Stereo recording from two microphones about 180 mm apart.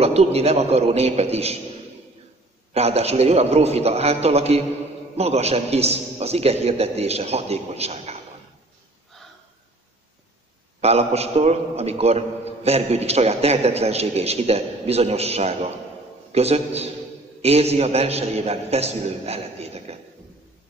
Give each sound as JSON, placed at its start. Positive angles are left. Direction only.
{"t": 0.0, "sound": "a man's voice", "side_deg": -35}
{"t": 2.7, "sound": "a man's voice", "side_deg": -35}
{"t": 10.8, "sound": "a man's voice", "side_deg": -35}